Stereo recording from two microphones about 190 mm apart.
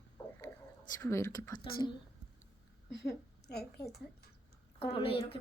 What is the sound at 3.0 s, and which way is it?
Speech, 60° left (ahead or behind).